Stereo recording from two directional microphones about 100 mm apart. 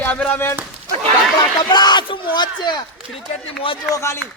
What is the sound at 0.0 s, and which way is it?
Speech, 15° left (ahead or behind).